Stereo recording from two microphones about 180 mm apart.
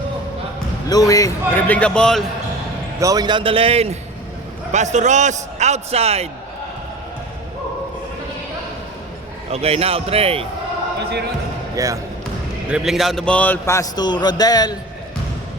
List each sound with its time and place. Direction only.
0.9 s a man's voice: 20° left (ahead or behind)
1.6 s a man's voice: 5° left (ahead or behind)
3.0 s a man's voice: 20° right (ahead or behind); by 6.2 s 35° right (ahead or behind)
9.5 s a man's voice: 35° right (ahead or behind)
11.8 s speech: 20° right (ahead or behind)
12.6 s a man's voice: 5° right (ahead or behind); by 14.8 s 20° left (ahead or behind)